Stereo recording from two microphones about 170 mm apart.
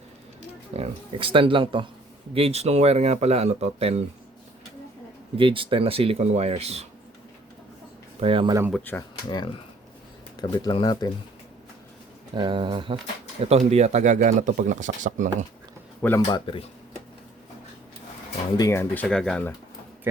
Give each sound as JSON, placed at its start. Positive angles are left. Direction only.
{"t": 0.7, "sound": "speech", "side_deg": -35}
{"t": 5.4, "sound": "speech", "side_deg": -30}
{"t": 8.2, "sound": "speech", "side_deg": -30}
{"t": 8.7, "sound": "speech", "side_deg": 10}
{"t": 10.3, "sound": "speech", "side_deg": 25}
{"t": 12.3, "sound": "speech", "side_deg": -30}
{"t": 16.0, "sound": "speech", "side_deg": 10}
{"t": 16.2, "sound": "speech", "side_deg": 30}
{"t": 18.5, "sound": "speech", "side_deg": 20}
{"t": 19.0, "sound": "speech", "side_deg": 5}